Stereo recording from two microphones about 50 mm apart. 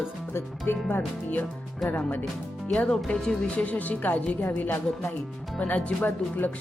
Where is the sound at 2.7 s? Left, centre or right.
Centre.